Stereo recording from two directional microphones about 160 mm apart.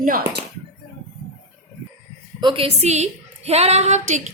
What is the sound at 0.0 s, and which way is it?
Speech, 60° right (ahead or behind).